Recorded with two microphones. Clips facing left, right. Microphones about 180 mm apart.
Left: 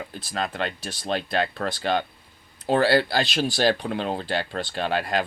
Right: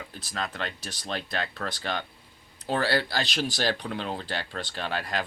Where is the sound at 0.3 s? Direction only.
60° left (ahead or behind).